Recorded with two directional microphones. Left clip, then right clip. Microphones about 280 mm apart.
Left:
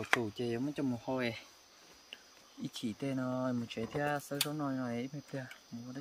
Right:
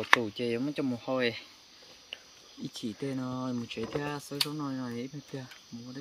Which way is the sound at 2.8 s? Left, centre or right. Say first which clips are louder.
Right 2 dB; centre.